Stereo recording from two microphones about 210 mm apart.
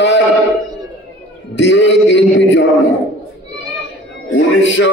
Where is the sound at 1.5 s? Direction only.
60° left (ahead or behind).